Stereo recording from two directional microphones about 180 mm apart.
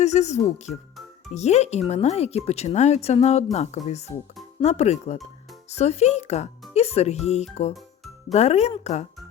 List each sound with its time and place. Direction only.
0.0 s speech: 40° left (ahead or behind)